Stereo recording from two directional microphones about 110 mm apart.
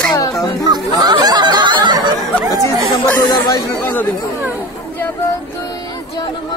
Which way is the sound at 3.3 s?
35° left (ahead or behind).